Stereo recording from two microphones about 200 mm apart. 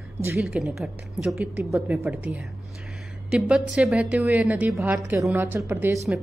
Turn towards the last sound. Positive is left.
turn(degrees=-10)  # may be behind; listen again after turning